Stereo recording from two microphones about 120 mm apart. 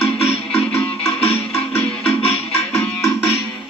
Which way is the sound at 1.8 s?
55° left (ahead or behind).